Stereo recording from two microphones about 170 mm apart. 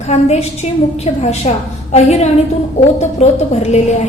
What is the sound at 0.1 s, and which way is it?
A woman's voice, 40° left (ahead or behind).